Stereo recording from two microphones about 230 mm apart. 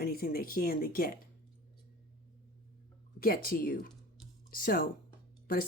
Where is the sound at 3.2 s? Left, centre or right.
Left.